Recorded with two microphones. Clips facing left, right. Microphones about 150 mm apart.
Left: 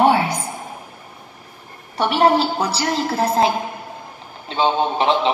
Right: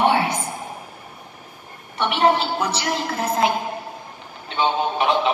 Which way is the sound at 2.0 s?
35° left (ahead or behind).